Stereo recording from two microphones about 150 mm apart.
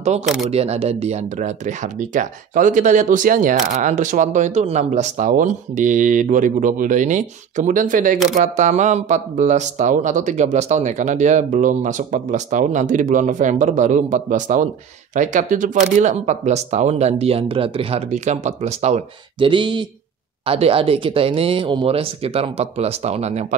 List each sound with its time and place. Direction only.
0.2 s speech: 5° right (ahead or behind)
0.5 s speech: 45° right (ahead or behind); by 8.2 s 60° right (ahead or behind)
8.4 s speech: 50° right (ahead or behind)
19.5 s speech: 30° right (ahead or behind); by 23.4 s 45° right (ahead or behind)